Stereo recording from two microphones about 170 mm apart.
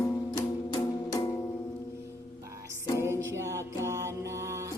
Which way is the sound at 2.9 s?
15° right (ahead or behind).